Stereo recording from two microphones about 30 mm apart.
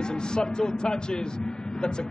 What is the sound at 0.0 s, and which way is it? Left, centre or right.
Speech, left.